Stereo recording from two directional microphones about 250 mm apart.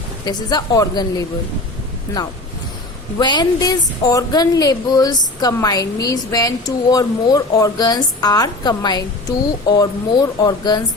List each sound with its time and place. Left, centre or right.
0.3 s speech: centre
3.2 s speech: centre